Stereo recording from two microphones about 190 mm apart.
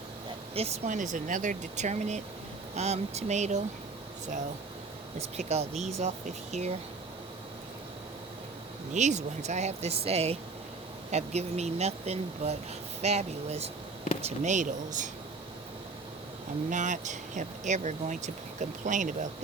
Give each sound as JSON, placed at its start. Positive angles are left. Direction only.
{"t": 0.5, "sound": "speech", "side_deg": -35}
{"t": 5.4, "sound": "speech", "side_deg": -35}
{"t": 8.9, "sound": "speech", "side_deg": -40}
{"t": 16.6, "sound": "speech", "side_deg": -40}